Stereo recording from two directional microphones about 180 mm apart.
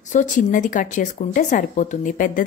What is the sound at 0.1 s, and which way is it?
A woman's voice, 45° left (ahead or behind).